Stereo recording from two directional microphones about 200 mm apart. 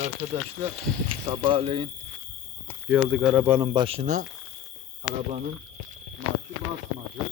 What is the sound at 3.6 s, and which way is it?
Speech, 25° right (ahead or behind).